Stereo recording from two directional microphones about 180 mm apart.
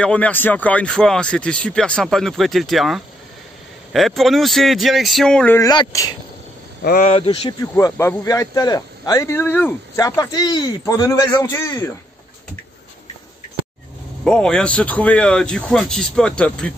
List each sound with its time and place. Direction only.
0.0 s speech: 5° left (ahead or behind)
5.6 s speech: 20° left (ahead or behind)
6.8 s speech: 55° left (ahead or behind)
7.1 s speech: 25° left (ahead or behind)
7.7 s speech: 15° left (ahead or behind)
14.2 s speech: 5° left (ahead or behind)